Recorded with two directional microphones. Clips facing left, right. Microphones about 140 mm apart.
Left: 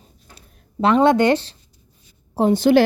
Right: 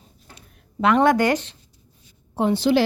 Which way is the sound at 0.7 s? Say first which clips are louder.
Left 2 dB; 25° left (ahead or behind).